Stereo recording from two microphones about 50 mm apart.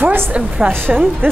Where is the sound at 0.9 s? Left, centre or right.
Centre.